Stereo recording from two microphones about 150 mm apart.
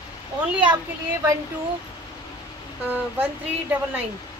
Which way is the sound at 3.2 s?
10° right (ahead or behind).